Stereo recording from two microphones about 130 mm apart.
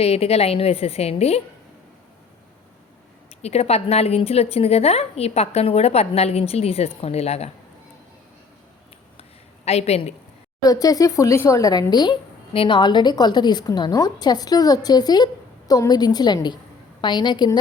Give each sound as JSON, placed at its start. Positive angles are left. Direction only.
{"t": 0.0, "sound": "a woman's voice", "side_deg": 50}
{"t": 3.4, "sound": "a woman's voice", "side_deg": 55}
{"t": 9.6, "sound": "a woman's voice", "side_deg": 55}
{"t": 10.6, "sound": "a woman's voice", "side_deg": 30}